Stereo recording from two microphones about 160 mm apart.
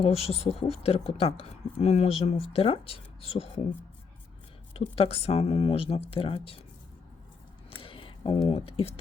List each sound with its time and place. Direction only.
0.0 s speech: 40° left (ahead or behind)
4.7 s speech: 40° left (ahead or behind)
7.8 s a sound: 35° left (ahead or behind)